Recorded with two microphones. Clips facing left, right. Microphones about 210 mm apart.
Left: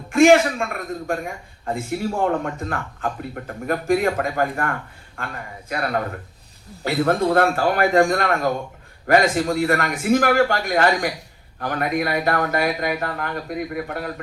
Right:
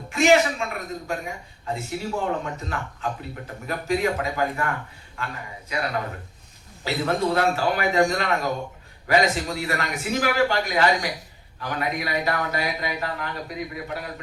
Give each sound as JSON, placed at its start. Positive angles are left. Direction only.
{"t": 0.1, "sound": "a man's voice", "side_deg": 50}